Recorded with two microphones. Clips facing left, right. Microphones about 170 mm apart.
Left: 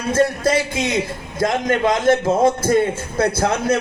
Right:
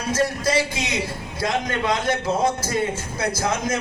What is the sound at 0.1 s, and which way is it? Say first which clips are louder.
A man's voice: left 5 dB; 55° left (ahead or behind).